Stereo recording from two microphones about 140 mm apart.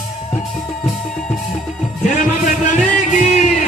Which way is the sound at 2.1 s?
60° left (ahead or behind).